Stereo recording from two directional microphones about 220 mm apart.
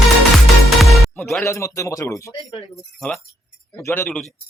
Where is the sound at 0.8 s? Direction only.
5° left (ahead or behind).